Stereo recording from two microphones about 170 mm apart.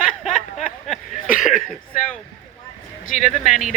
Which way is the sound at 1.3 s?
50° left (ahead or behind).